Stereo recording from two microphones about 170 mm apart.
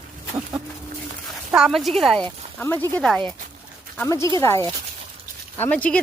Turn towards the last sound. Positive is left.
turn(degrees=10)  # may be behind; listen again after turning